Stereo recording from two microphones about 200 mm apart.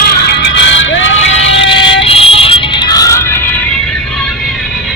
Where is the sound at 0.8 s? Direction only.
70° left (ahead or behind).